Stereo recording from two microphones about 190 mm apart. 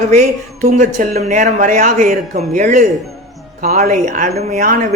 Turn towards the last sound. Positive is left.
turn(degrees=-45)  # may be behind; listen again after turning